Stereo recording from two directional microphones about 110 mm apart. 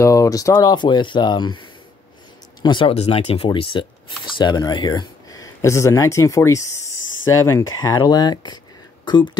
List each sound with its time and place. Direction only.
0.0 s speech: 30° left (ahead or behind)
2.6 s speech: 45° left (ahead or behind)
2.9 s speech: 75° left (ahead or behind)
3.4 s speech: 50° left (ahead or behind)
4.4 s speech: 40° left (ahead or behind)